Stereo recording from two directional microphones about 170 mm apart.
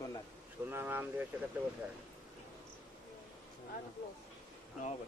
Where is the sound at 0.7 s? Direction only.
10° right (ahead or behind).